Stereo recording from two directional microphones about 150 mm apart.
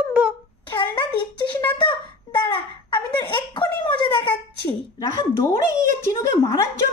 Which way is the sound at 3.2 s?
30° left (ahead or behind).